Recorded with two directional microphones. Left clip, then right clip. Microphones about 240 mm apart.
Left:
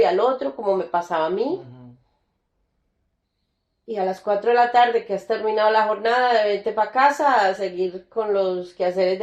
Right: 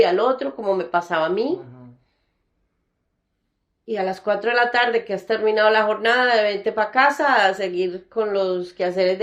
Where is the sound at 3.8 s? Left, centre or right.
Right.